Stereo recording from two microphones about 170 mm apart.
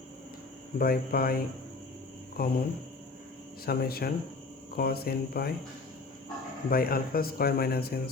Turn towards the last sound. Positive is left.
turn(degrees=65)  # may be behind; listen again after turning